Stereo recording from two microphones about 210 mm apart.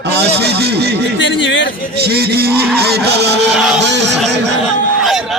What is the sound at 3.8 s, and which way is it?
Music, 55° right (ahead or behind).